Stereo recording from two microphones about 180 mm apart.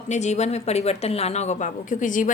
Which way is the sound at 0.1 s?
40° left (ahead or behind).